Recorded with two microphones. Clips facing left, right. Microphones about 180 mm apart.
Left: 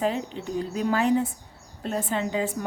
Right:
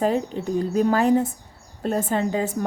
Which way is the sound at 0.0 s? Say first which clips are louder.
Right 5 dB; 45° right (ahead or behind).